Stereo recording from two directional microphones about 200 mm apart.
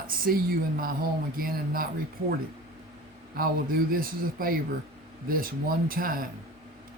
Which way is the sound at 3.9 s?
45° right (ahead or behind).